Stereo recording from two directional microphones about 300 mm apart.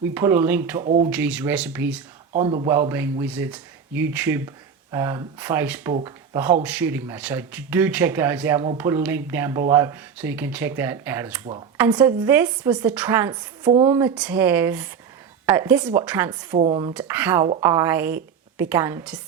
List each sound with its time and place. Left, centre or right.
0.1 s speech: centre
0.9 s speech: right
1.1 s speech: centre
2.3 s speech: centre
16.9 s speech: centre